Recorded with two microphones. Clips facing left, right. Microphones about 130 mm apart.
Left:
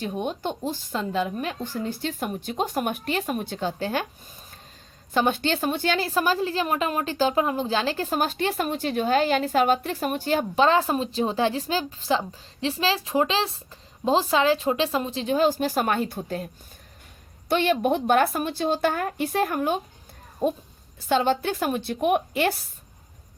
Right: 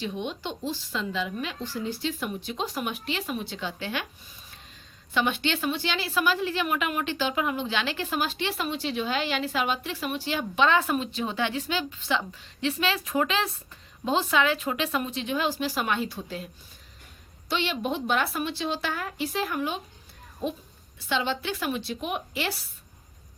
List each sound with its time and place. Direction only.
0.0 s speech: 45° left (ahead or behind)
5.1 s a woman's voice: 40° left (ahead or behind)
17.5 s speech: 50° left (ahead or behind)